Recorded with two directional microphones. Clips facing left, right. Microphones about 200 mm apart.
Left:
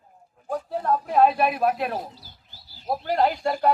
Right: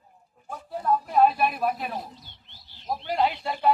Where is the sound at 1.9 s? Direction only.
Centre (ahead or behind).